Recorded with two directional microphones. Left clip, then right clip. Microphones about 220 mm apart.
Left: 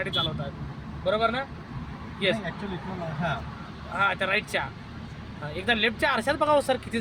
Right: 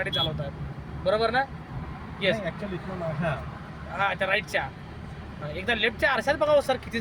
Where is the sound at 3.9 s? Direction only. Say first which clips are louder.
Left 1 dB; 15° left (ahead or behind).